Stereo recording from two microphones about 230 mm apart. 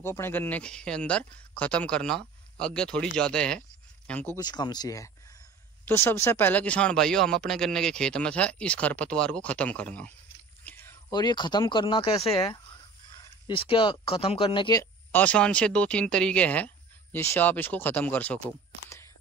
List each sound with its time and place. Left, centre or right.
0.0 s speech: centre
4.4 s speech: centre